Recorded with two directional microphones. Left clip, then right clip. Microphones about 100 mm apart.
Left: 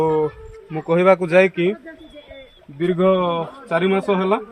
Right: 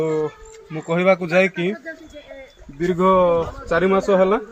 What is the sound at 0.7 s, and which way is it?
Speech, 25° left (ahead or behind).